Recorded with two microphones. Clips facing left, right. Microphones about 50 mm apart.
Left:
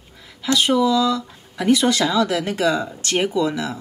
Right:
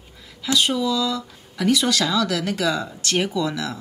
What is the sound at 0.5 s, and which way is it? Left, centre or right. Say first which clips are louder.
Speech: left 4 dB; left.